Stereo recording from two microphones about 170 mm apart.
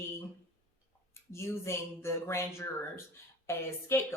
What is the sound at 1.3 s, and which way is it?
Speech, 15° left (ahead or behind).